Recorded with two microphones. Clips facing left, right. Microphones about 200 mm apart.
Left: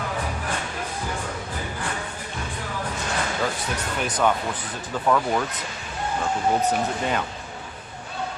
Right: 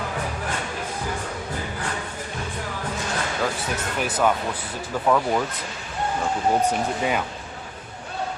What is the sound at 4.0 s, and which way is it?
Speech, 5° right (ahead or behind).